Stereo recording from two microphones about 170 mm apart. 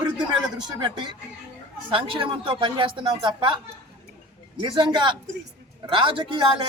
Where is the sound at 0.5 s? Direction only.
25° right (ahead or behind).